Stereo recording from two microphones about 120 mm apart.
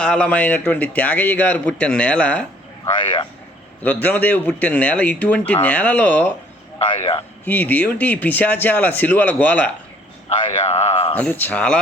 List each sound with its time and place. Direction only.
0.0 s speech: 10° left (ahead or behind)
2.8 s speech: 45° left (ahead or behind)
3.8 s speech: 15° left (ahead or behind)
6.7 s speech: 45° left (ahead or behind)
7.0 s speech: 55° left (ahead or behind)
7.4 s speech: 15° left (ahead or behind)
10.6 s a sound: 65° left (ahead or behind)
11.2 s speech: 15° left (ahead or behind)